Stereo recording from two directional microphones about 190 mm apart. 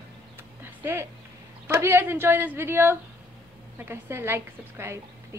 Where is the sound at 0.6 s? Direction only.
10° right (ahead or behind).